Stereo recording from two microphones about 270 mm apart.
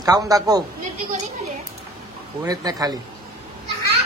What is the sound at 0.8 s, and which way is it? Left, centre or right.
Speech, right.